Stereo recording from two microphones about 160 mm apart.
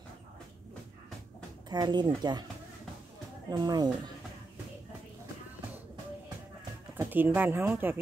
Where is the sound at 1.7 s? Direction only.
25° right (ahead or behind).